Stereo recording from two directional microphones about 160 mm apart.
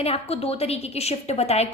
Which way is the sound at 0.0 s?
40° left (ahead or behind).